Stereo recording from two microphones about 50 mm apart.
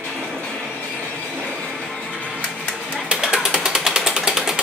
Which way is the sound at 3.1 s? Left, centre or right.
Centre.